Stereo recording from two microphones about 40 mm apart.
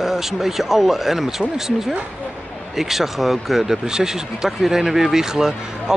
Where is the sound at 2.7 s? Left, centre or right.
Centre.